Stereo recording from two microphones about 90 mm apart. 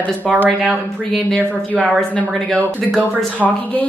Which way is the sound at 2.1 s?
15° left (ahead or behind).